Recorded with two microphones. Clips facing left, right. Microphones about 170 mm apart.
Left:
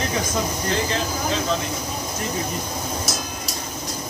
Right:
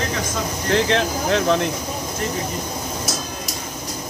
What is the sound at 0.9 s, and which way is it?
Speech, 65° right (ahead or behind).